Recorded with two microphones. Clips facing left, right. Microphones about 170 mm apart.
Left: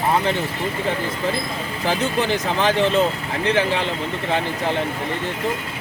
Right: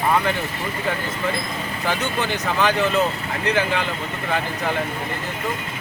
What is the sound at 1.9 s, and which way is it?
Speech, 35° left (ahead or behind).